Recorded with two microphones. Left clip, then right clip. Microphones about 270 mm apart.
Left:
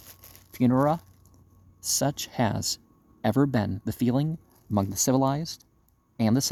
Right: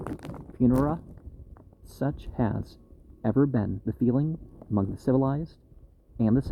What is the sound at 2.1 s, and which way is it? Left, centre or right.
Speech, left.